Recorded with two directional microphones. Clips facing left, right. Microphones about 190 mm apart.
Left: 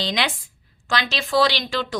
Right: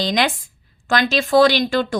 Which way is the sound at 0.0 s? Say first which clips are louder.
Right 5 dB; 45° right (ahead or behind).